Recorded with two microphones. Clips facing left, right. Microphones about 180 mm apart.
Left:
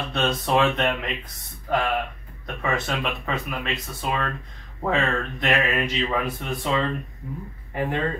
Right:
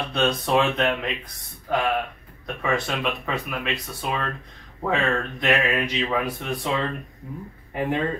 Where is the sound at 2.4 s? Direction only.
Centre (ahead or behind).